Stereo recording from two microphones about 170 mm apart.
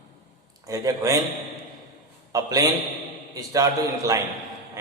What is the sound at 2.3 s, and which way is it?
A man's voice, 20° right (ahead or behind).